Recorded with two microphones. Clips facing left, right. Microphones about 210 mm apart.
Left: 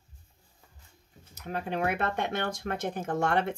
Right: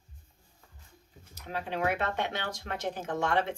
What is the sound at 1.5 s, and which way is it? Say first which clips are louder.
Speech: left 1 dB; 55° left (ahead or behind).